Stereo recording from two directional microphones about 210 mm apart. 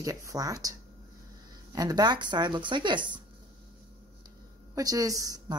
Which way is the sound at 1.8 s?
20° right (ahead or behind).